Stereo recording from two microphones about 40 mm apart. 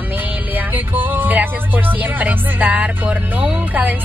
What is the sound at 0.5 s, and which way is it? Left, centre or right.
Speech, right.